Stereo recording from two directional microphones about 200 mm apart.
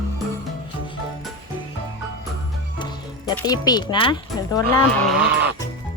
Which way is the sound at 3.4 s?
20° left (ahead or behind).